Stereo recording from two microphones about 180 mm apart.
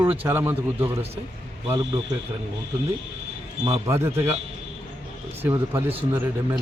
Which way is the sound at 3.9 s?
15° right (ahead or behind).